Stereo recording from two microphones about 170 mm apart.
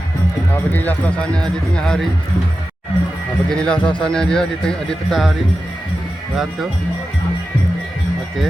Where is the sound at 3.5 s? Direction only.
5° left (ahead or behind).